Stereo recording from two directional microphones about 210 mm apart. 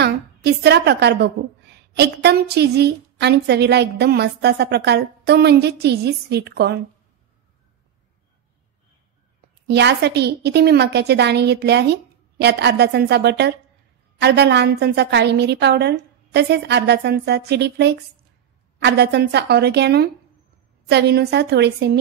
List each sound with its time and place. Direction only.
0.0 s a woman's voice: 50° right (ahead or behind)
9.7 s a woman's voice: 55° right (ahead or behind)